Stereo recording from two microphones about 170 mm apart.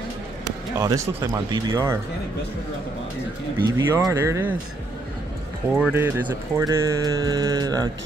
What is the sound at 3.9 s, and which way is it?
Speech, 20° right (ahead or behind).